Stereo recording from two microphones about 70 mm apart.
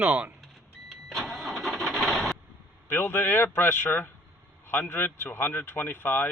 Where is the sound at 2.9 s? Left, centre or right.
Left.